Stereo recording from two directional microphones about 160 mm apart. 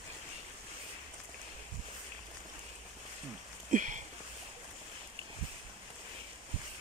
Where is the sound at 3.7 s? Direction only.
50° right (ahead or behind).